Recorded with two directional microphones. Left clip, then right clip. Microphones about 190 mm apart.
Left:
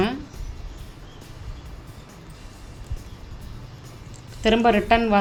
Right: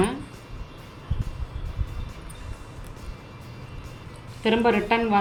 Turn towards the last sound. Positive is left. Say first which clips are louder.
# left 3 dB
turn(degrees=50)  # may be behind; listen again after turning